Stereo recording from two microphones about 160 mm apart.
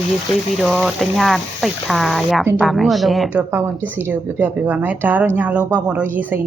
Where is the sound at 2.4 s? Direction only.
10° right (ahead or behind).